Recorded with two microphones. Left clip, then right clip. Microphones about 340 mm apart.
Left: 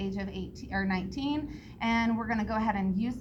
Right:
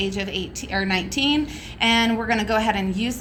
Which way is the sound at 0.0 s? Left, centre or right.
Left.